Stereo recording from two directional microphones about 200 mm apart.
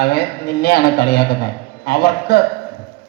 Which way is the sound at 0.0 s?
55° left (ahead or behind).